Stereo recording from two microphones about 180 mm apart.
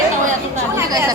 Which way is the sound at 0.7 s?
20° right (ahead or behind).